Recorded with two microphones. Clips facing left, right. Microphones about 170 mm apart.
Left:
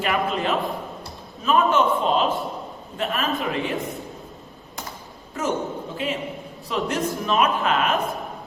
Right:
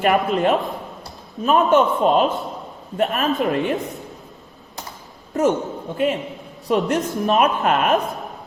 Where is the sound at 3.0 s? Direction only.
45° right (ahead or behind).